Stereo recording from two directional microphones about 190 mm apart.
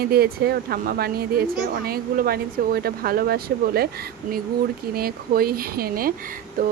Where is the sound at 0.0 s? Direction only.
55° right (ahead or behind).